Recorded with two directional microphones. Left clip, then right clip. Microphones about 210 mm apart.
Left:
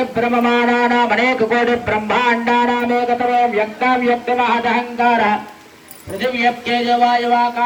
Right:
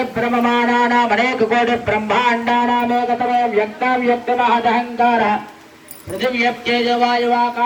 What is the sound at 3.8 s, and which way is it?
A man's voice, 35° left (ahead or behind).